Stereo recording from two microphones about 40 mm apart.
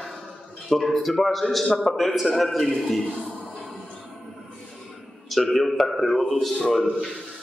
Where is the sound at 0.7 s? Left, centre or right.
Centre.